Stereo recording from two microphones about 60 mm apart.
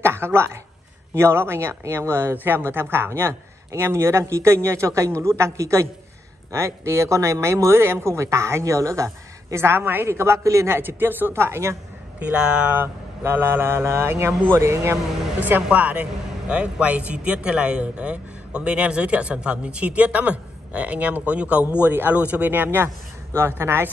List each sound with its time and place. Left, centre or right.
0.0 s speech: right
9.8 s speech: right
10.0 s speech: right
10.8 s speech: right
11.3 s speech: right
12.2 s speech: centre
12.7 s speech: right
15.4 s a man's voice: right